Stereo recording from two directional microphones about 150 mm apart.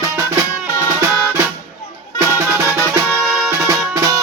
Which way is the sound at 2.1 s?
15° right (ahead or behind).